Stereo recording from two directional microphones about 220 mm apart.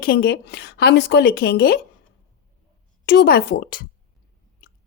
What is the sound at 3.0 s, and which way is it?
Speech, 45° left (ahead or behind).